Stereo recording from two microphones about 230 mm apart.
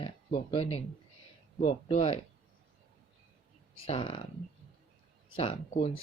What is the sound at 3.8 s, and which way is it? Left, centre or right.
Speech, left.